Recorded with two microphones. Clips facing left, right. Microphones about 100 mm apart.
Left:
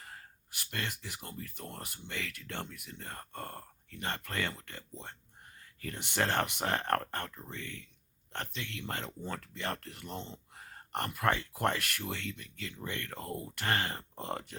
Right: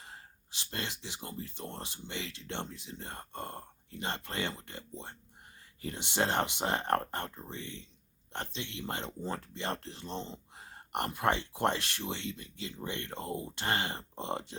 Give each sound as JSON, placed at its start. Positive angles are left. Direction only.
{"t": 0.0, "sound": "speech", "side_deg": -25}